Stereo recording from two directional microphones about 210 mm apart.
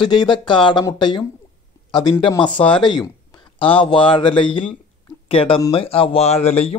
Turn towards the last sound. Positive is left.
turn(degrees=30)  # may be behind; listen again after turning